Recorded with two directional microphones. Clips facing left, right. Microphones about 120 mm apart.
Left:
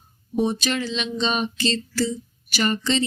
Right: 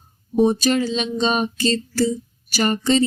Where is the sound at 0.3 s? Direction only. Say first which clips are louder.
Right 6 dB; 40° right (ahead or behind).